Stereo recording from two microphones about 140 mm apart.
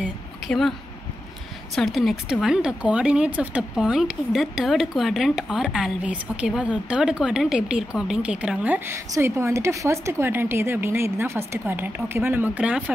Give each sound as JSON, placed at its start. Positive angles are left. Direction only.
{"t": 0.5, "sound": "speech", "side_deg": 0}
{"t": 1.8, "sound": "speech", "side_deg": 0}